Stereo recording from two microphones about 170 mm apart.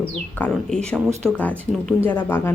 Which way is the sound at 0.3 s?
5° left (ahead or behind).